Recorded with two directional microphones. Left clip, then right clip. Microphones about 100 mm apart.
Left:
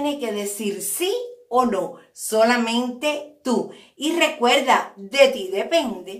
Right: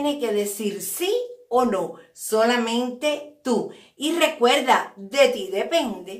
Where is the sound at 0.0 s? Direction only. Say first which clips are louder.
Right 2 dB; 20° right (ahead or behind).